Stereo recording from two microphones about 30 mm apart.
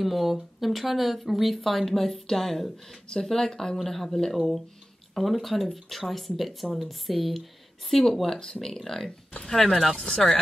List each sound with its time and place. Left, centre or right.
0.0 s speech: centre
7.9 s speech: centre
9.8 s speech: left